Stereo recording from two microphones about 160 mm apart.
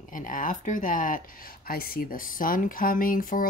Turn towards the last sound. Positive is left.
turn(degrees=60)  # may be behind; listen again after turning